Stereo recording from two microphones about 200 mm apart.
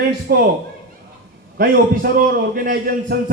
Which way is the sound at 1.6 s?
50° right (ahead or behind).